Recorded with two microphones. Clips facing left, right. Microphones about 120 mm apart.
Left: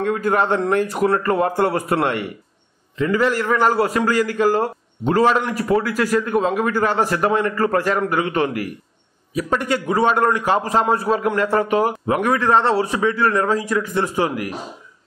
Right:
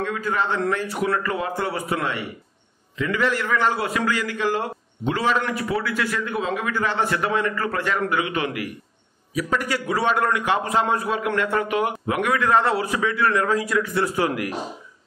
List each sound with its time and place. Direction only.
0.0 s a man's voice: 50° left (ahead or behind)
3.0 s a man's voice: 35° left (ahead or behind)
9.3 s a man's voice: 25° left (ahead or behind)